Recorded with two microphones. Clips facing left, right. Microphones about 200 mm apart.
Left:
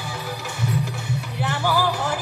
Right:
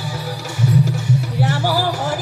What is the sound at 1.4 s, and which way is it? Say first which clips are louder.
Music: right 1 dB; 40° right (ahead or behind).